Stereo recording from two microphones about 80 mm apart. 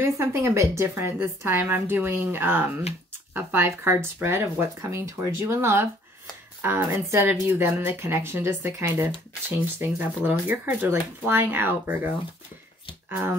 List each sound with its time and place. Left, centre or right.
0.0 s a woman's voice: right